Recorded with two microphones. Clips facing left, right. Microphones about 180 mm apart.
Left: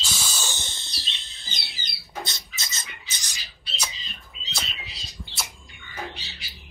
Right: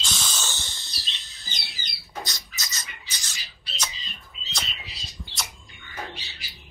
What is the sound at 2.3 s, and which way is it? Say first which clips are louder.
Bird: left 1 dB; 25° left (ahead or behind).